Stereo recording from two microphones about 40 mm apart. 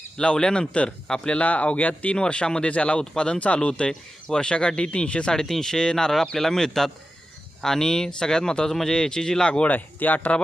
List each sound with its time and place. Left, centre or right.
0.2 s speech: left
1.4 s speech: left
2.1 s speech: left
5.3 s speech: centre
9.6 s speech: left